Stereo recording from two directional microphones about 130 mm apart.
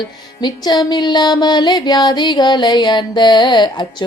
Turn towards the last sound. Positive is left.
turn(degrees=35)  # may be behind; listen again after turning